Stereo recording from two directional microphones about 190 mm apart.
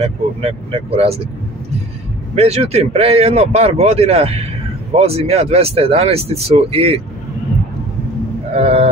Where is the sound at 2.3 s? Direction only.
35° right (ahead or behind).